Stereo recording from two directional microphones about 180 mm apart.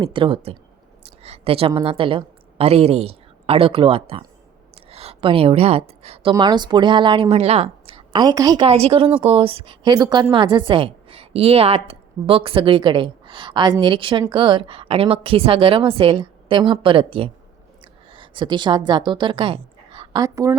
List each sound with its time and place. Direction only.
0.0 s a woman's voice: 30° right (ahead or behind)
6.0 s a sound: 35° right (ahead or behind)
6.3 s a woman's voice: 25° right (ahead or behind)
8.6 s a woman's voice: 35° right (ahead or behind)